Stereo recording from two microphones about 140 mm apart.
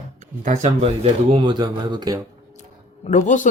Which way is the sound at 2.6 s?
55° left (ahead or behind).